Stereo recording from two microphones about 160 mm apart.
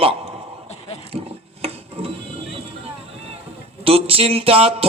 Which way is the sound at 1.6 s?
40° right (ahead or behind).